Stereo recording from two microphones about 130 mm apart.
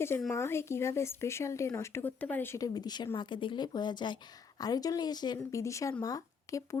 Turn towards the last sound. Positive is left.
turn(degrees=25)  # may be behind; listen again after turning